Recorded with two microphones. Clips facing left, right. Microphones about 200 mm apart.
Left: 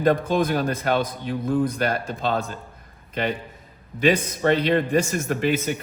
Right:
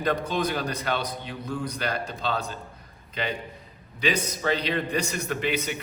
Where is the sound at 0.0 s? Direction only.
50° left (ahead or behind).